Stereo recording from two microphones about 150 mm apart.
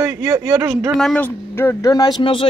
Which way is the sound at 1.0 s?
5° left (ahead or behind).